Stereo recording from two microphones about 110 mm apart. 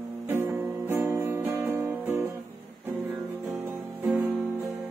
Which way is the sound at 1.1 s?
20° right (ahead or behind).